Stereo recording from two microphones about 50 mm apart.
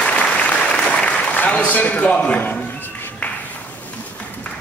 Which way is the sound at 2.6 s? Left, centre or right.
Left.